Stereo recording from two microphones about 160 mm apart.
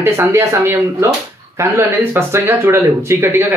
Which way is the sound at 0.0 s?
15° right (ahead or behind).